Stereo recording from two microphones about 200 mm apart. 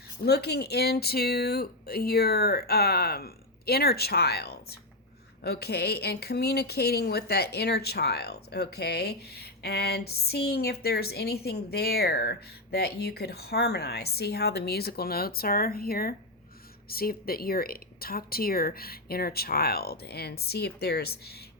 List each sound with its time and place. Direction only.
0.3 s speech: 55° left (ahead or behind)